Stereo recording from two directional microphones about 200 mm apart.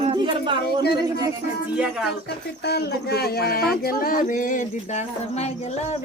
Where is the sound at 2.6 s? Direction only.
55° left (ahead or behind); by 6.0 s 35° left (ahead or behind).